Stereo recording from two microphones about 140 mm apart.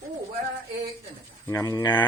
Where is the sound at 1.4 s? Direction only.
20° left (ahead or behind).